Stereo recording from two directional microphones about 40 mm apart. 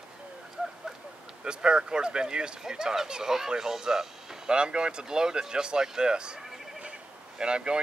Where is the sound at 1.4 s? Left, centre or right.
Right.